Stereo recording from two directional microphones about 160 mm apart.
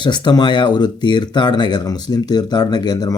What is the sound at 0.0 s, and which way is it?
Speech, 25° left (ahead or behind).